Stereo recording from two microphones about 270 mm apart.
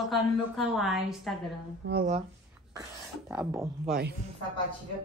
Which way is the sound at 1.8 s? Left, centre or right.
Right.